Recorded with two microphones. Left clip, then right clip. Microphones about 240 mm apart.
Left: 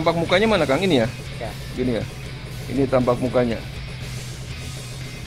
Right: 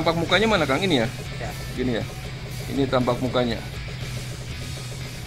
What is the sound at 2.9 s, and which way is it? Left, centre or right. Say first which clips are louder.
Speech: left 4 dB; left.